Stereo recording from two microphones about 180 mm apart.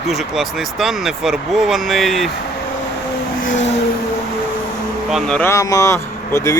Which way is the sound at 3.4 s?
45° left (ahead or behind).